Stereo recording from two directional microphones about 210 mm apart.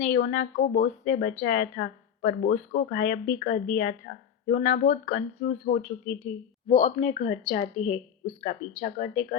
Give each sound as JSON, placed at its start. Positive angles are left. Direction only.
{"t": 0.0, "sound": "a woman's voice", "side_deg": 40}